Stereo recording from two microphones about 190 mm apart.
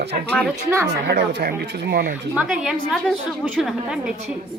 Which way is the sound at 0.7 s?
15° right (ahead or behind).